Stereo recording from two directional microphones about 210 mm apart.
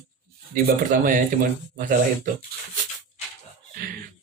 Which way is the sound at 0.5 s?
40° right (ahead or behind).